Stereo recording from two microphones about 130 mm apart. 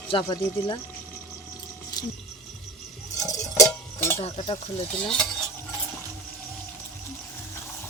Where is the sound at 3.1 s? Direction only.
25° left (ahead or behind).